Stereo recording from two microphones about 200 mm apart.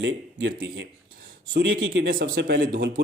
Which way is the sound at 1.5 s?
75° right (ahead or behind).